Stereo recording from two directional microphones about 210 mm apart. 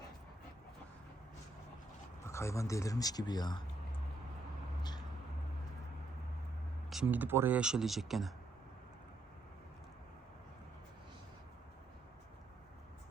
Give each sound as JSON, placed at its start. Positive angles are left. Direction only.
{"t": 2.2, "sound": "speech", "side_deg": 15}
{"t": 6.9, "sound": "speech", "side_deg": -10}